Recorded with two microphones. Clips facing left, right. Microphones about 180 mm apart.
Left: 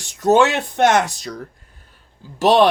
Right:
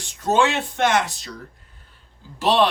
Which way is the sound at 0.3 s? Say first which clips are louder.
Left 2 dB; 45° left (ahead or behind).